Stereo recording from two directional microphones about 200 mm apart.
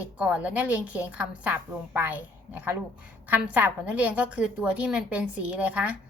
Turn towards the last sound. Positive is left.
turn(degrees=-5)  # may be behind; listen again after turning